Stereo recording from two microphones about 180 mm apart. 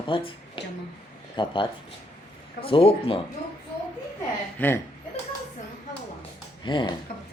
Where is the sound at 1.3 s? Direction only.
25° left (ahead or behind).